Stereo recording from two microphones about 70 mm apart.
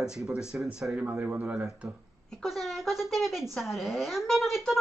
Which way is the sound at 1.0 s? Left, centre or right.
Right.